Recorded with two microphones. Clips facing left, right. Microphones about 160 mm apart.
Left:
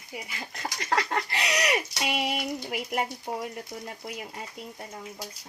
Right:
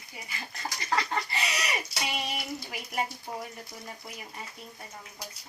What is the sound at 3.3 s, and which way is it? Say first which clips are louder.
Speech: left 5 dB; 60° left (ahead or behind).